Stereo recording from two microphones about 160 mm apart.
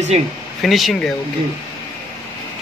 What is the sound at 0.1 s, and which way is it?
Speech, 40° right (ahead or behind).